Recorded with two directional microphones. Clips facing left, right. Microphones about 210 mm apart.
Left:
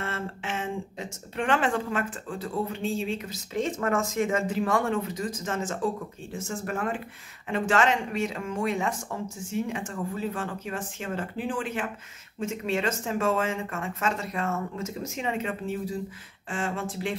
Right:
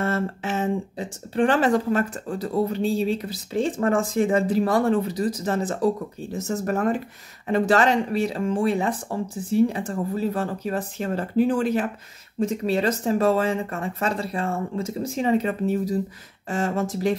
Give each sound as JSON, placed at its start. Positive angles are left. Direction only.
{"t": 0.0, "sound": "speech", "side_deg": -40}